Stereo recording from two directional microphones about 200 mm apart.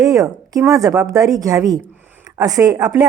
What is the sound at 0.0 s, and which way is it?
Speech, 15° right (ahead or behind).